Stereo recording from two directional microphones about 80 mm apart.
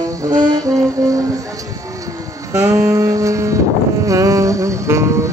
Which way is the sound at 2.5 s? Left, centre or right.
Right.